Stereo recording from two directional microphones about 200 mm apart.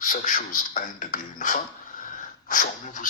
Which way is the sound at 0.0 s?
40° left (ahead or behind).